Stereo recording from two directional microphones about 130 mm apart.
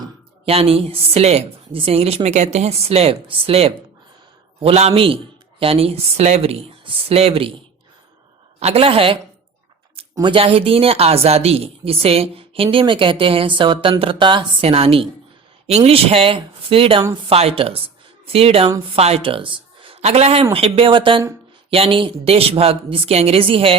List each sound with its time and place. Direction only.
0.4 s a woman's voice: 50° right (ahead or behind)
8.5 s a woman's voice: 50° right (ahead or behind)
10.2 s a woman's voice: 40° right (ahead or behind)
20.0 s a woman's voice: 55° right (ahead or behind)